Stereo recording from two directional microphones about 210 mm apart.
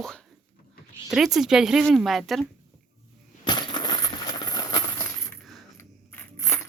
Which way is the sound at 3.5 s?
20° left (ahead or behind).